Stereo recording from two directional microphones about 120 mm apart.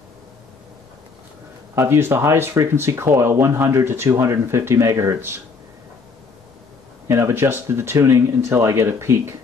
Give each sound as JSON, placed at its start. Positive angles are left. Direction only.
{"t": 1.8, "sound": "speech", "side_deg": -20}
{"t": 7.1, "sound": "speech", "side_deg": -20}